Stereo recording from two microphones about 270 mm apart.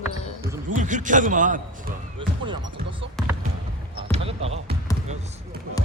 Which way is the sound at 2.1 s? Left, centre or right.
Centre.